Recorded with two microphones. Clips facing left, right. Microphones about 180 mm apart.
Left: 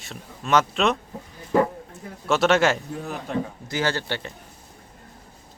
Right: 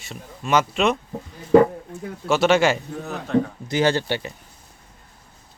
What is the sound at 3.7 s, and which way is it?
Speech, 20° right (ahead or behind).